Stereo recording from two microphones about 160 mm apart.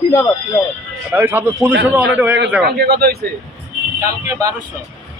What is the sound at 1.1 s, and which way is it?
A man's voice, 10° right (ahead or behind).